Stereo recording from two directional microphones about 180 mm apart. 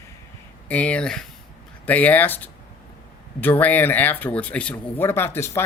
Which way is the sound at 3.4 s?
10° left (ahead or behind).